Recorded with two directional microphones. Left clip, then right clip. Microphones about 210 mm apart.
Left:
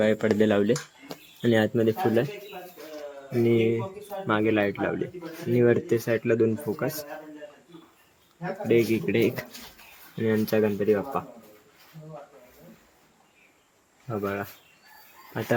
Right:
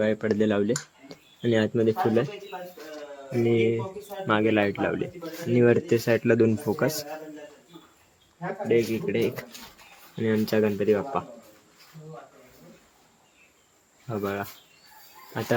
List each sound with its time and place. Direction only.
0.0 s speech: 5° left (ahead or behind)
3.4 s speech: 5° left (ahead or behind); by 7.1 s 15° right (ahead or behind)
8.6 s speech: 20° left (ahead or behind)
10.2 s speech: centre (ahead or behind)
14.1 s speech: centre (ahead or behind)